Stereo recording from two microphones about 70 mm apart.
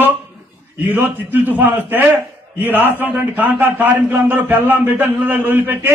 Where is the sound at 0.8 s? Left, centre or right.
Right.